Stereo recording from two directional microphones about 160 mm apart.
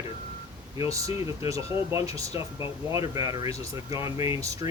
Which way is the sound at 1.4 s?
20° right (ahead or behind).